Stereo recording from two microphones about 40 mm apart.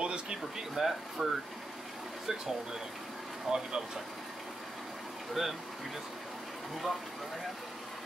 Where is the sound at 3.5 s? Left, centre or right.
Centre.